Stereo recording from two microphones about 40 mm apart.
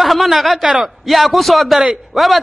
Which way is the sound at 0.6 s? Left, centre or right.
Centre.